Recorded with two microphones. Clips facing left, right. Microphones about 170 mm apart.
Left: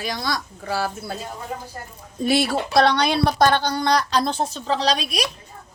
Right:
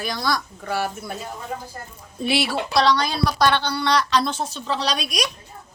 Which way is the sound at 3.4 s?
40° left (ahead or behind).